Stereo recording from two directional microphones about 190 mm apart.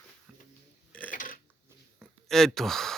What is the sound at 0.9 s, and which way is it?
Burping, 5° left (ahead or behind).